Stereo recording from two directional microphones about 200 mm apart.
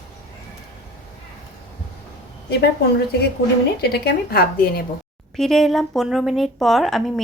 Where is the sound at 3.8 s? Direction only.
55° left (ahead or behind).